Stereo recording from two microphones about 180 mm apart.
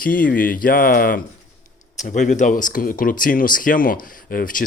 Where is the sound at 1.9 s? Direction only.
40° left (ahead or behind).